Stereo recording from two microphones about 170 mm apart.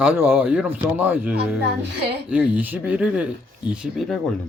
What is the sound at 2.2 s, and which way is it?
Speech, 10° right (ahead or behind).